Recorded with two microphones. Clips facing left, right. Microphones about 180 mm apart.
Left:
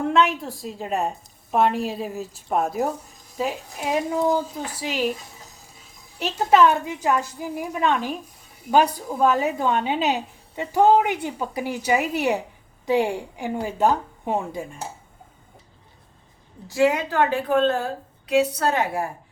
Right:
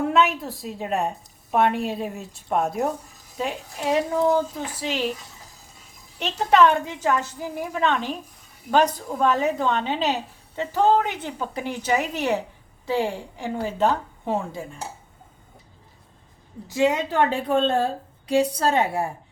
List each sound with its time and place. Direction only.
0.0 s a woman's voice: 5° right (ahead or behind)
6.1 s a woman's voice: 5° left (ahead or behind)
16.6 s a woman's voice: 20° right (ahead or behind)